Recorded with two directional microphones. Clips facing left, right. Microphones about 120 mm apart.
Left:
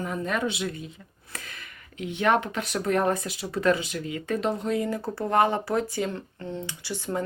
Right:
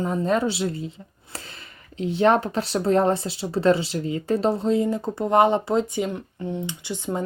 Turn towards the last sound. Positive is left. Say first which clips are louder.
# right 2 dB
turn(degrees=-20)  # may be behind; listen again after turning